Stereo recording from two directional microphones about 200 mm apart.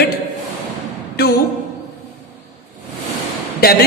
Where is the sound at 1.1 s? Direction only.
55° left (ahead or behind).